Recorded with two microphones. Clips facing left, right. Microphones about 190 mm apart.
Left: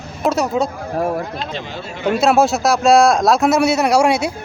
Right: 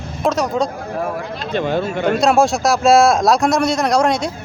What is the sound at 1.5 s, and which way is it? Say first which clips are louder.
Speech: right 9 dB; 55° right (ahead or behind).